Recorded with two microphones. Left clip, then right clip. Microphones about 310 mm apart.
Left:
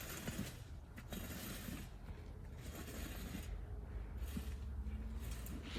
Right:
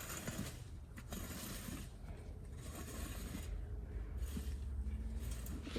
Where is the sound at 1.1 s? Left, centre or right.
Centre.